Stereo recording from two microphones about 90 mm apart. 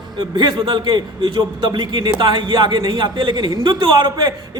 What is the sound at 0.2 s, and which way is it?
A man's voice, 55° right (ahead or behind).